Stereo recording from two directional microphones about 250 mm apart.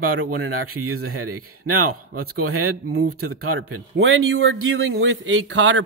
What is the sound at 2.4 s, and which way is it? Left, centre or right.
Speech, right.